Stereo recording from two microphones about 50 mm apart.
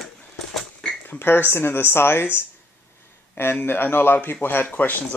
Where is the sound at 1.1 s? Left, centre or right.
Left.